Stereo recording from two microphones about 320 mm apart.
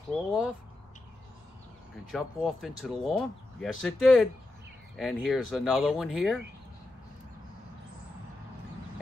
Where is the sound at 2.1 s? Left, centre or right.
Centre.